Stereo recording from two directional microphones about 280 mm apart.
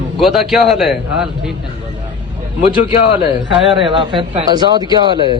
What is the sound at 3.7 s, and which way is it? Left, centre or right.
A man's voice, centre.